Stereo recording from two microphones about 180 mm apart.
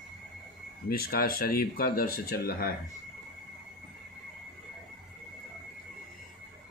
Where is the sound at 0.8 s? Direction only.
55° left (ahead or behind).